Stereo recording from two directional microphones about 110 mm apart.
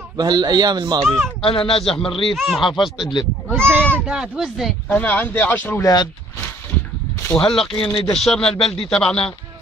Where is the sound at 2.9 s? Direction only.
45° left (ahead or behind).